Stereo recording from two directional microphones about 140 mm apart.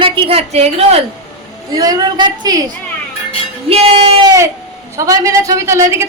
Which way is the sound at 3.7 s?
45° right (ahead or behind).